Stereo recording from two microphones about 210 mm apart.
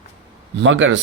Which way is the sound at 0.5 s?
65° right (ahead or behind).